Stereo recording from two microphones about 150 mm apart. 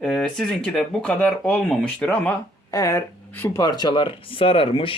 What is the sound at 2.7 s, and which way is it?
A man's voice, 20° left (ahead or behind).